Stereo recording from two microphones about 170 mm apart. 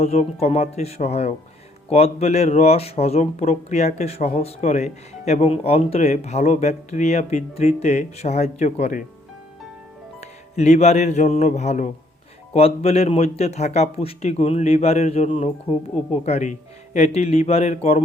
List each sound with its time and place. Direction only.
0.0 s speech: 40° left (ahead or behind)
10.2 s music: 40° left (ahead or behind)
12.5 s speech: 35° left (ahead or behind)